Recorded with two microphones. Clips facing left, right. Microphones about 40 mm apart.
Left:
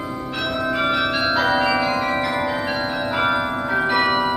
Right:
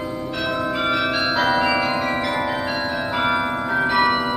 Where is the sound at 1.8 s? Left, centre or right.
Centre.